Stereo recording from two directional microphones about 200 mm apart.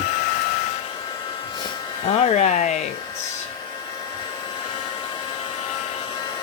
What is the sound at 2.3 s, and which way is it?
Speech, 35° left (ahead or behind).